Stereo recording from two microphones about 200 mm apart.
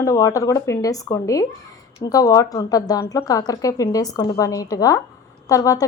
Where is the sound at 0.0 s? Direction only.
15° left (ahead or behind).